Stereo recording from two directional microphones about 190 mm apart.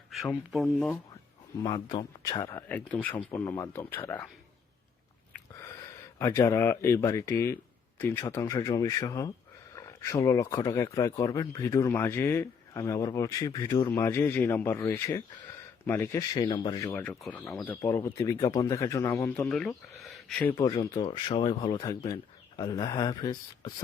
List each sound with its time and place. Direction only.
0.5 s speech: centre (ahead or behind)
1.6 s speech: 25° left (ahead or behind)
2.5 s speech: 10° left (ahead or behind)
6.1 s speech: 15° left (ahead or behind)
20.6 s speech: 20° left (ahead or behind)